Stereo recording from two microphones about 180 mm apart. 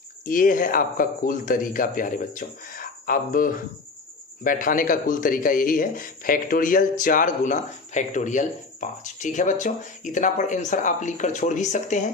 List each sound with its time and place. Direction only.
0.3 s speech: 50° left (ahead or behind)